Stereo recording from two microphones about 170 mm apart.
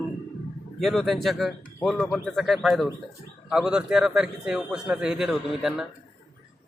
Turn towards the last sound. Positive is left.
turn(degrees=0)  # may be behind; listen again after turning